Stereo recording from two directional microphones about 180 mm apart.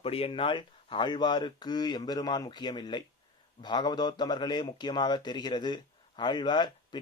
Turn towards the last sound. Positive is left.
turn(degrees=25)  # may be behind; listen again after turning